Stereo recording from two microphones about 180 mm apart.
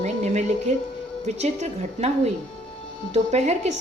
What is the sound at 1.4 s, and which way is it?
A woman's voice, 35° right (ahead or behind).